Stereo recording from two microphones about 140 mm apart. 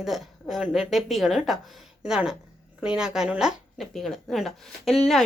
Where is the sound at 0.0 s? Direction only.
Centre (ahead or behind).